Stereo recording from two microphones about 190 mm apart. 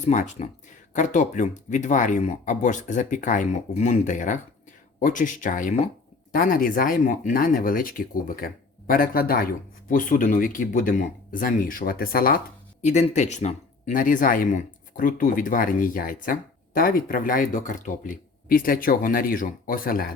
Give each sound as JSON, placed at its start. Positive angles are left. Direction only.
{"t": 0.0, "sound": "speech", "side_deg": 40}
{"t": 12.8, "sound": "speech", "side_deg": 35}